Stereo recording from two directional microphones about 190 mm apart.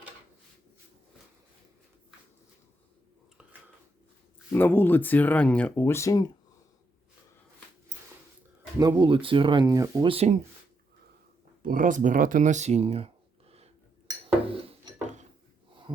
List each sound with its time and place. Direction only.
4.5 s speech: 10° left (ahead or behind)
8.8 s speech: 20° right (ahead or behind)
10.1 s speech: 30° right (ahead or behind)
11.6 s speech: 45° right (ahead or behind)
14.4 s a sound: 30° right (ahead or behind)